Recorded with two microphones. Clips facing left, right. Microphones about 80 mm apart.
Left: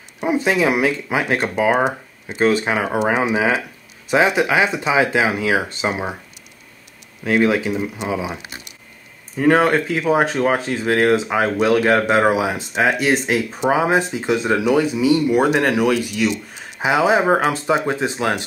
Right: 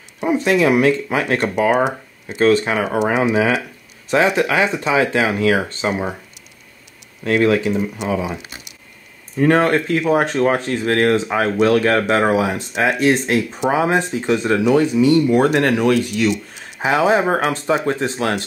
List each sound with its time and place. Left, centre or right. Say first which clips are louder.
0.2 s speech: right 2 dB; centre
7.2 s speech: right 1 dB; centre
9.4 s speech: even; centre